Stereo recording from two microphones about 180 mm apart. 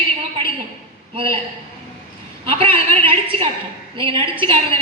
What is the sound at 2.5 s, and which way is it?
A woman's voice, 30° right (ahead or behind).